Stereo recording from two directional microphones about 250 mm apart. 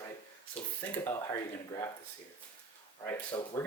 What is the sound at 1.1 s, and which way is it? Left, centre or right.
Speech, centre.